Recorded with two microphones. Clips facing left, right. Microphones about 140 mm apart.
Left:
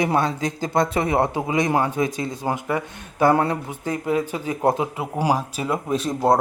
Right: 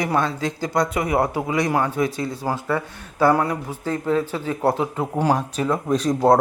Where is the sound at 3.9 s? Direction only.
15° left (ahead or behind).